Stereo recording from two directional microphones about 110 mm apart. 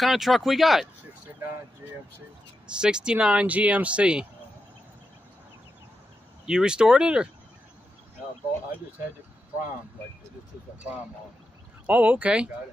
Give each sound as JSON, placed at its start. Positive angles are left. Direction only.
{"t": 0.0, "sound": "speech", "side_deg": 0}
{"t": 1.8, "sound": "speech", "side_deg": -20}
{"t": 2.6, "sound": "speech", "side_deg": -10}
{"t": 6.4, "sound": "speech", "side_deg": -5}
{"t": 11.8, "sound": "speech", "side_deg": -15}